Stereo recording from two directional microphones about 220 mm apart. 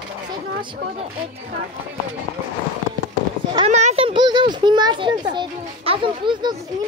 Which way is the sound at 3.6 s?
30° right (ahead or behind).